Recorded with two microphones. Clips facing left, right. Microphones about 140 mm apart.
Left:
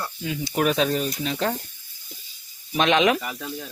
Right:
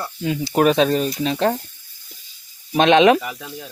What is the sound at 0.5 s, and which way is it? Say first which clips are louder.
Speech: right 6 dB; 55° right (ahead or behind).